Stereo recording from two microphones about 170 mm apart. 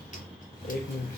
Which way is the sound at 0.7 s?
50° left (ahead or behind).